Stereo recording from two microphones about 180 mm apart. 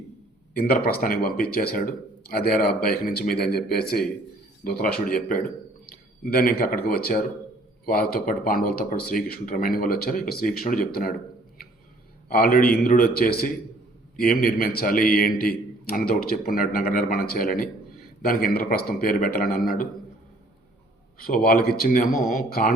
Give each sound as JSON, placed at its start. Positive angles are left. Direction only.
{"t": 0.5, "sound": "a man's voice", "side_deg": 55}
{"t": 12.3, "sound": "a man's voice", "side_deg": 55}
{"t": 21.2, "sound": "speech", "side_deg": 55}